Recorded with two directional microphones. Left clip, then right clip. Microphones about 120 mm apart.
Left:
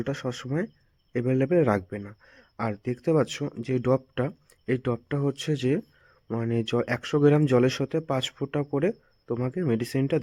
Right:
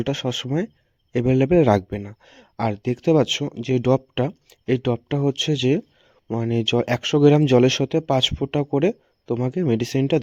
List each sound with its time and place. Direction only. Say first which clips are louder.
0.0 s speech: right 7 dB; 35° right (ahead or behind)